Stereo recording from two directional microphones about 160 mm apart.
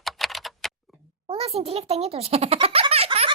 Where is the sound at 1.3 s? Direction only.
40° right (ahead or behind).